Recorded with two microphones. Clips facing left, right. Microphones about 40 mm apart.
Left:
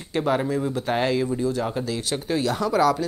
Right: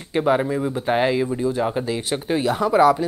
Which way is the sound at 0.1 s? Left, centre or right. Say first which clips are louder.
Right 3 dB; centre.